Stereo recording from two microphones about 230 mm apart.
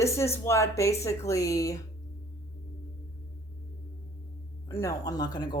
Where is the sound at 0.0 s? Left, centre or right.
Centre.